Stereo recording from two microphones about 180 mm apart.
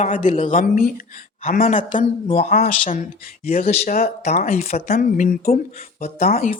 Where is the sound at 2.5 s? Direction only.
45° left (ahead or behind).